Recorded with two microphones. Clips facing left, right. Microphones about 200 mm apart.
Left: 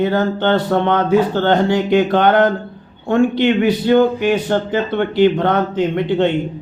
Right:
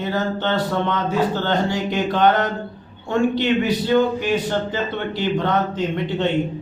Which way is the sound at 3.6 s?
55° left (ahead or behind).